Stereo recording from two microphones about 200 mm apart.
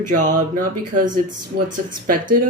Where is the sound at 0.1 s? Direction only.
40° right (ahead or behind).